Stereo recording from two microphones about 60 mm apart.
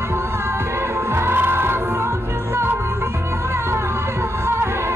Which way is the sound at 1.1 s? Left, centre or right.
Right.